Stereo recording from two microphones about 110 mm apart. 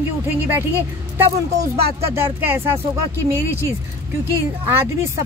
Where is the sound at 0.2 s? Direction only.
20° right (ahead or behind).